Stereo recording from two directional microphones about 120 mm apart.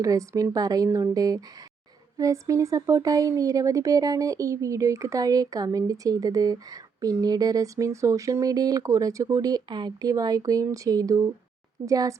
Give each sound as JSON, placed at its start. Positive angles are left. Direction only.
{"t": 0.0, "sound": "speech", "side_deg": -30}